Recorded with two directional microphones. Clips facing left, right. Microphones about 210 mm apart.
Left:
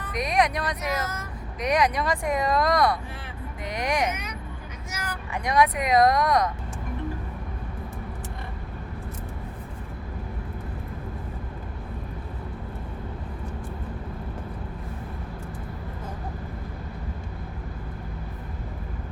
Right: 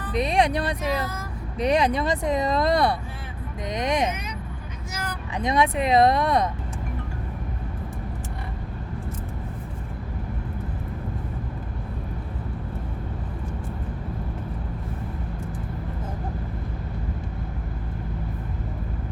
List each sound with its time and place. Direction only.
0.1 s speech: 30° right (ahead or behind)
5.3 s speech: 25° right (ahead or behind)